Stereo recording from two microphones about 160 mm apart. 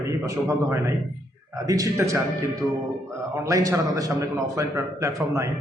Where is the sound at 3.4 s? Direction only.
20° right (ahead or behind).